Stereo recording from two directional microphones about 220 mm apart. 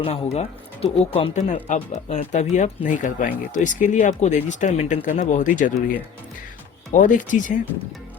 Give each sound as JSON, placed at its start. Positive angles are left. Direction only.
{"t": 0.0, "sound": "speech", "side_deg": 25}
{"t": 6.9, "sound": "speech", "side_deg": 35}